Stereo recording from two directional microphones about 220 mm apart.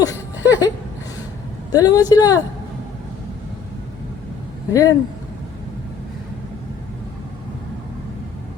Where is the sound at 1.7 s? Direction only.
15° left (ahead or behind).